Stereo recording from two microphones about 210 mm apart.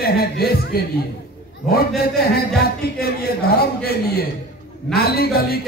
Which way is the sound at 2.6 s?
45° left (ahead or behind).